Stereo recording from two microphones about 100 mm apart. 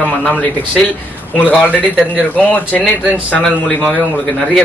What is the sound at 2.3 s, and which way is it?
Speech, 15° left (ahead or behind).